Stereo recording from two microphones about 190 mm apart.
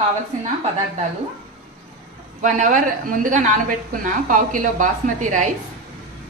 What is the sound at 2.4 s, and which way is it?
A woman's voice, 40° right (ahead or behind).